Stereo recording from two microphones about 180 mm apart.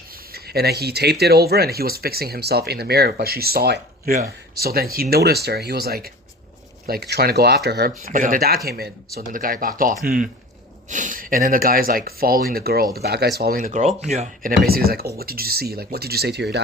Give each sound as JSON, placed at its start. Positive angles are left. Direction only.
{"t": 0.3, "sound": "speech", "side_deg": -60}
{"t": 14.7, "sound": "speech", "side_deg": -55}